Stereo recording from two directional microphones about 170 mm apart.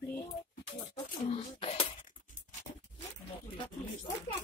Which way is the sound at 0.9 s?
35° left (ahead or behind).